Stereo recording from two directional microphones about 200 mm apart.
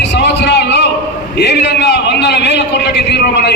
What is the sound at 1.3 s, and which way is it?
A man's voice, 60° left (ahead or behind).